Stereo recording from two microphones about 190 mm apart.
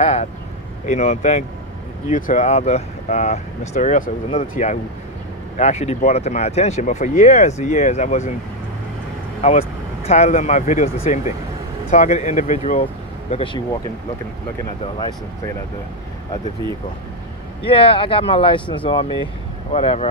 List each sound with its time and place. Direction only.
0.0 s speech: 35° left (ahead or behind)
9.4 s speech: 35° left (ahead or behind)
13.3 s speech: 30° left (ahead or behind)
17.6 s speech: 30° left (ahead or behind)